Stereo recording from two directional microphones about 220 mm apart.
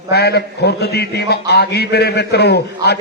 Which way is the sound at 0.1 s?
45° left (ahead or behind).